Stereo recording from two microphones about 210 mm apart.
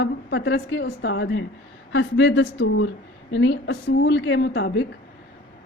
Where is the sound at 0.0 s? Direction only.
55° left (ahead or behind).